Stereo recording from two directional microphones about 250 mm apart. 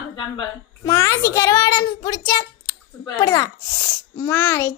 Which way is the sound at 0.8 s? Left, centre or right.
Centre.